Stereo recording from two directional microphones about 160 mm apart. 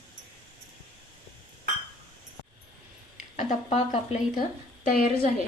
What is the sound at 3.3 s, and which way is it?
Speech, 50° left (ahead or behind).